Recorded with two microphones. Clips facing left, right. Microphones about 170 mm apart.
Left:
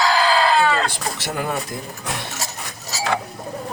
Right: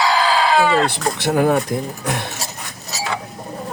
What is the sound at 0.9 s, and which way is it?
Speech, 65° right (ahead or behind).